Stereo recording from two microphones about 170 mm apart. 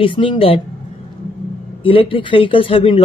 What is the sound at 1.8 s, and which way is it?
Speech, 30° left (ahead or behind).